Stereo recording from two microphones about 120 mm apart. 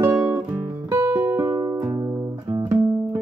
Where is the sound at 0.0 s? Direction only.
20° right (ahead or behind).